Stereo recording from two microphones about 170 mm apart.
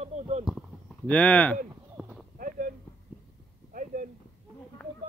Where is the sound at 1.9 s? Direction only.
5° right (ahead or behind).